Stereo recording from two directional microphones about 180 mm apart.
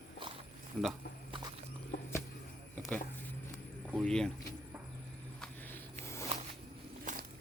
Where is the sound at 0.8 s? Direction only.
5° left (ahead or behind).